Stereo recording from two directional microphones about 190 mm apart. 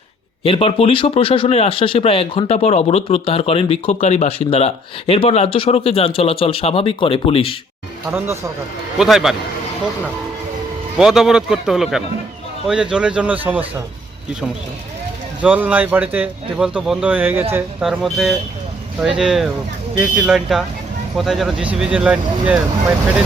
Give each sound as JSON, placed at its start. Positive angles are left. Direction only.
{"t": 0.4, "sound": "speech", "side_deg": 30}
{"t": 8.1, "sound": "speech", "side_deg": -5}
{"t": 10.9, "sound": "speech", "side_deg": 0}
{"t": 15.4, "sound": "speech", "side_deg": -10}